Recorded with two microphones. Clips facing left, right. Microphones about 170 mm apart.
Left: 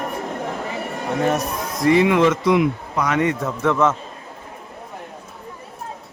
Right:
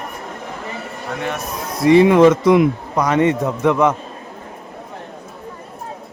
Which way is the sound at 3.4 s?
15° right (ahead or behind).